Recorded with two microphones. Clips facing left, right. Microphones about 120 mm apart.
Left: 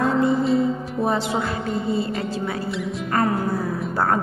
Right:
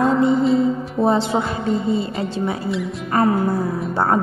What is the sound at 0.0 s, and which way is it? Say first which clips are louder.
Music: right 3 dB; 25° right (ahead or behind).